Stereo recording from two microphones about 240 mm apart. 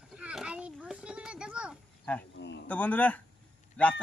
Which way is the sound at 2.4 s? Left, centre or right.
Left.